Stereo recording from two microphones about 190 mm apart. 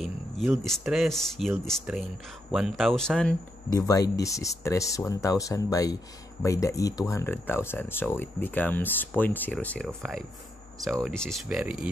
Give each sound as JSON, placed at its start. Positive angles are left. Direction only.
{"t": 0.7, "sound": "speech", "side_deg": 0}
{"t": 3.7, "sound": "speech", "side_deg": 20}